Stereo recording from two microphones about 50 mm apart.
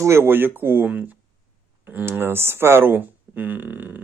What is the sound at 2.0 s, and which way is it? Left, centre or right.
Speech, right.